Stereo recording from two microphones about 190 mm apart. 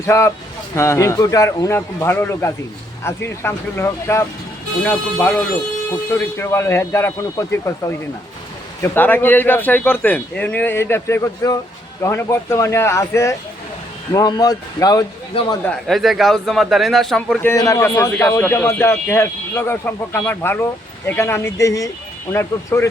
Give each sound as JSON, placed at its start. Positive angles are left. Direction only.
{"t": 0.0, "sound": "a man's voice", "side_deg": 15}
{"t": 6.4, "sound": "a man's voice", "side_deg": 15}
{"t": 15.9, "sound": "a man's voice", "side_deg": 0}